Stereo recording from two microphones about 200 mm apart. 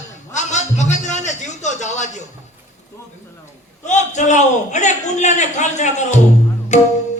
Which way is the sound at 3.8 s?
35° left (ahead or behind).